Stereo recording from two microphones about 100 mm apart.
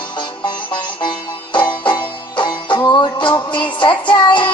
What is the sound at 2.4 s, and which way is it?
Music, 50° left (ahead or behind).